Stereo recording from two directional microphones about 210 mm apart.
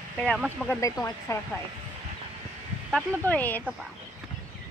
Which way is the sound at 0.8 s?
15° left (ahead or behind).